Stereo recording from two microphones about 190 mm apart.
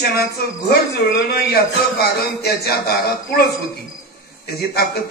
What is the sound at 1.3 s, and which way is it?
A man's voice, 55° left (ahead or behind).